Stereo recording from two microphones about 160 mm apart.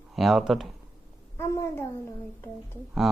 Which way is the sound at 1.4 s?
15° left (ahead or behind).